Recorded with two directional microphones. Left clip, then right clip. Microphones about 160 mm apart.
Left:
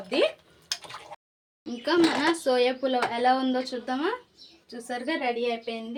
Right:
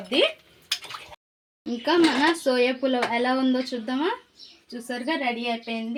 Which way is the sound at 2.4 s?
50° right (ahead or behind).